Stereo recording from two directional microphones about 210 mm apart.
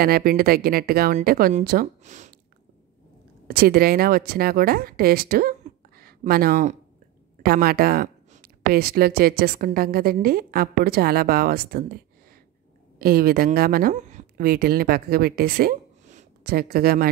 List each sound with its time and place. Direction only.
0.0 s speech: 45° right (ahead or behind)
3.4 s speech: 45° right (ahead or behind)
13.0 s speech: 45° right (ahead or behind)